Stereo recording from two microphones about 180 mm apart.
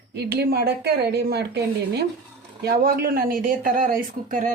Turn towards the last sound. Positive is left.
turn(degrees=-50)  # may be behind; listen again after turning